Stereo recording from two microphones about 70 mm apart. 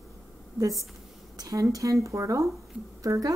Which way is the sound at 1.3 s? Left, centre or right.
Right.